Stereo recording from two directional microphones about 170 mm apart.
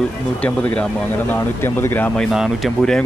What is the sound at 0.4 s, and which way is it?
Speech, 10° left (ahead or behind).